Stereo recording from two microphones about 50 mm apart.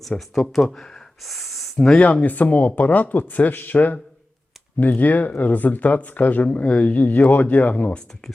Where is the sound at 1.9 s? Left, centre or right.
Left.